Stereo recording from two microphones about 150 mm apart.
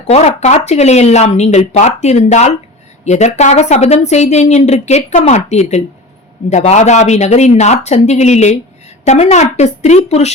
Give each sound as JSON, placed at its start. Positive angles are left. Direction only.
{"t": 0.1, "sound": "a woman's voice", "side_deg": 50}